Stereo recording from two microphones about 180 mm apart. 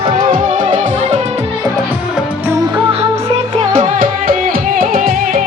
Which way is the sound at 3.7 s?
50° right (ahead or behind).